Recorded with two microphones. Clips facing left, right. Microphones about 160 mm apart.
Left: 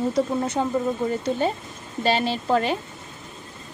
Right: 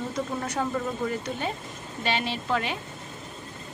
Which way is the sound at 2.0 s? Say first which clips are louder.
Left 6 dB; 35° left (ahead or behind).